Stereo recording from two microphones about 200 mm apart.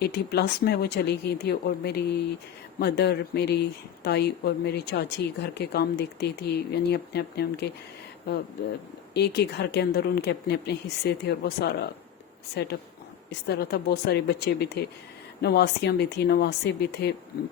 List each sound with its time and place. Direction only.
0.0 s speech: 55° left (ahead or behind)
9.1 s speech: 55° left (ahead or behind)
13.5 s speech: 55° left (ahead or behind)